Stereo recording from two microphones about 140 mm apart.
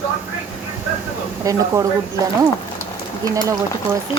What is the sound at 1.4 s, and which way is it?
Speech, 25° right (ahead or behind).